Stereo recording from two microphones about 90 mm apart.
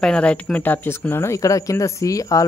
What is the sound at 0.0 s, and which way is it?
Speech, 10° left (ahead or behind).